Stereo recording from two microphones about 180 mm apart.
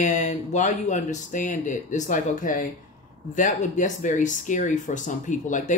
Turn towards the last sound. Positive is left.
turn(degrees=45)  # may be behind; listen again after turning